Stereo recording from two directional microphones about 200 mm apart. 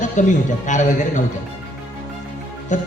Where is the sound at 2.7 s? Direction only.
35° left (ahead or behind).